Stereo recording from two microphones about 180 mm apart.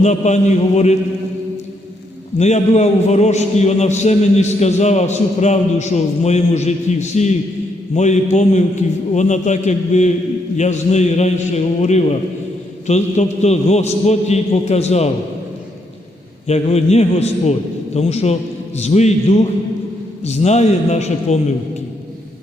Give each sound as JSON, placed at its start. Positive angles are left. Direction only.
{"t": 0.0, "sound": "a man's voice", "side_deg": 40}
{"t": 2.4, "sound": "a man's voice", "side_deg": 40}
{"t": 16.5, "sound": "a man's voice", "side_deg": 35}